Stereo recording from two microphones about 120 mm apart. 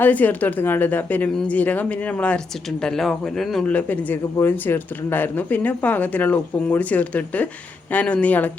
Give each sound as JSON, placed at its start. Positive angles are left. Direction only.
{"t": 0.0, "sound": "speech", "side_deg": 15}